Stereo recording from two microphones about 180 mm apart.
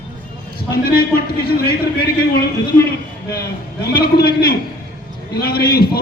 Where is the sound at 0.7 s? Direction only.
55° left (ahead or behind).